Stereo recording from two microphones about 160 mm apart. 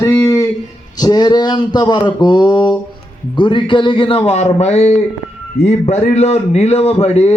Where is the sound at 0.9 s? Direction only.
25° left (ahead or behind).